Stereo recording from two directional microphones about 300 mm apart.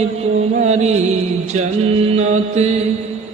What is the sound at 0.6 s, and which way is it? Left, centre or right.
Music, right.